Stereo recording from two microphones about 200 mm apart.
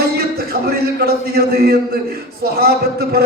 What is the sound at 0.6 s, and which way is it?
A man's voice, 50° right (ahead or behind).